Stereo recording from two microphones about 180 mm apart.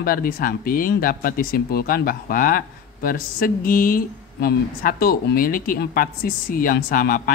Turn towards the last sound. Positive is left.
turn(degrees=50)  # may be behind; listen again after turning